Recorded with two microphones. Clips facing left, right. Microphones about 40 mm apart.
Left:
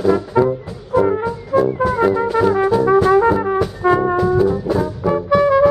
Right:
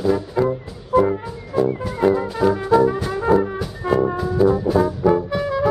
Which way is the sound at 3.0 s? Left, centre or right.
Left.